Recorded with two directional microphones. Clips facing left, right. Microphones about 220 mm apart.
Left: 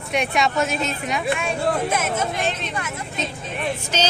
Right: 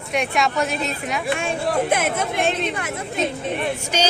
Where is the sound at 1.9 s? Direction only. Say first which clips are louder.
Right 2 dB; 55° right (ahead or behind).